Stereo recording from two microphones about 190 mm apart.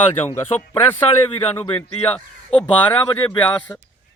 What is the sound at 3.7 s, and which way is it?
Speech, 15° left (ahead or behind).